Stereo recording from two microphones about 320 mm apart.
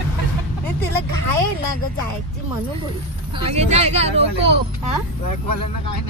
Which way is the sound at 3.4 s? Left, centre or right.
Centre.